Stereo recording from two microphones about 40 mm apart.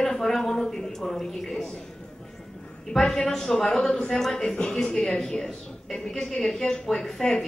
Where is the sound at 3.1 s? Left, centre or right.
Centre.